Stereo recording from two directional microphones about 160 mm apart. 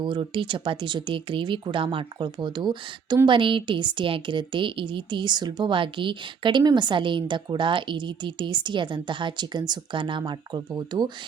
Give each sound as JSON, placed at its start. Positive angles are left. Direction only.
{"t": 0.0, "sound": "a woman's voice", "side_deg": -30}